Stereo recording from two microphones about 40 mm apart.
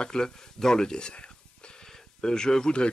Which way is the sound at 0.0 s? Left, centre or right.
Centre.